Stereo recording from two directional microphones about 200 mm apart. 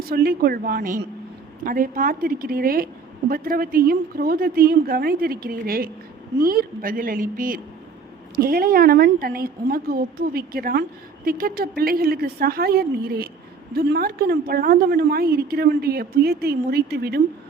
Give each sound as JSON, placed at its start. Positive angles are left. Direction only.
{"t": 0.0, "sound": "a woman's voice", "side_deg": -50}